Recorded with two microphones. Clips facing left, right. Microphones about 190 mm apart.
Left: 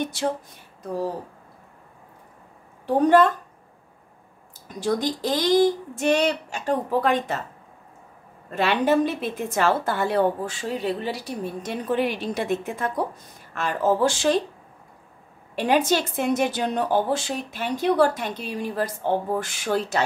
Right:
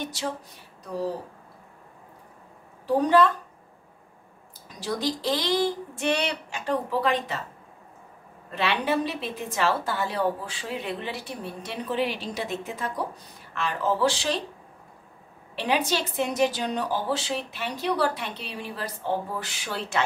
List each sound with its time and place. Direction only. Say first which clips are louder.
0.0 s speech: left 6 dB; 55° left (ahead or behind)
3.0 s a woman's voice: left 4 dB; 50° left (ahead or behind)
4.7 s a woman's voice: left 4 dB; 50° left (ahead or behind)
8.5 s a woman's voice: left 5 dB; 45° left (ahead or behind)
15.5 s a woman's voice: left 5 dB; 45° left (ahead or behind)